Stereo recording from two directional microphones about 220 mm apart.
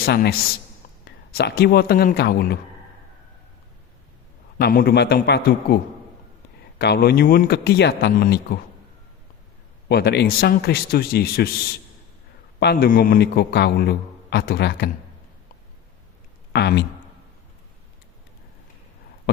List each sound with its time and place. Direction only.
0.0 s a man's voice: 45° left (ahead or behind)
4.5 s a man's voice: 40° left (ahead or behind)
9.9 s a man's voice: 50° left (ahead or behind)
12.5 s a man's voice: 45° left (ahead or behind)
16.5 s speech: 50° left (ahead or behind)